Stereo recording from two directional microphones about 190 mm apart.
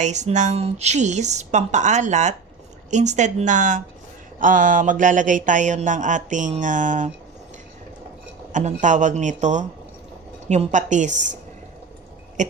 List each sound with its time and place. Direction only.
0.0 s speech: 40° right (ahead or behind)
8.5 s speech: 40° right (ahead or behind)
12.4 s speech: 40° right (ahead or behind)